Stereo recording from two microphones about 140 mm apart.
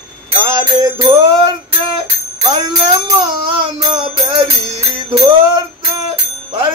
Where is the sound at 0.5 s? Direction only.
30° right (ahead or behind).